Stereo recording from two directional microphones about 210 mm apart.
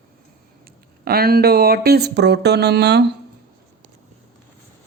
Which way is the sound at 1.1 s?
45° right (ahead or behind).